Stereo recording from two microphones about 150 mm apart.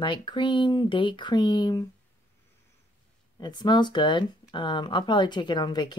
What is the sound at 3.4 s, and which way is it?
Speech, 30° left (ahead or behind).